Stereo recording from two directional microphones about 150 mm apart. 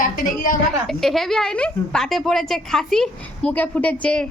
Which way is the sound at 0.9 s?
Centre (ahead or behind).